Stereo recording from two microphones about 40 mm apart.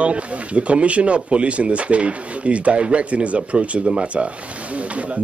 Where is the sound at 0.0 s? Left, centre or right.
Right.